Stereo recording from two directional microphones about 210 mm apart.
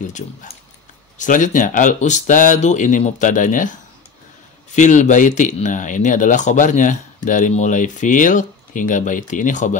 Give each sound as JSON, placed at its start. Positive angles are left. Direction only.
{"t": 0.0, "sound": "speech", "side_deg": 35}
{"t": 4.7, "sound": "speech", "side_deg": 35}